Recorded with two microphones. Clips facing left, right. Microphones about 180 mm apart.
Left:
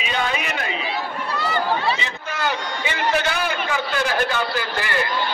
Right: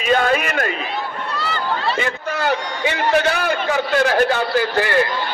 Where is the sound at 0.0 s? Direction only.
50° right (ahead or behind).